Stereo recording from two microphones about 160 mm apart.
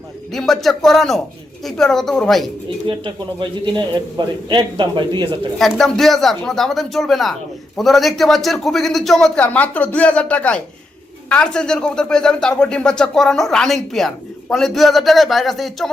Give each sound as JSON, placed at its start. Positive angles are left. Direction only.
{"t": 0.3, "sound": "speech", "side_deg": 0}
{"t": 3.8, "sound": "speech", "side_deg": -25}
{"t": 5.5, "sound": "speech", "side_deg": 0}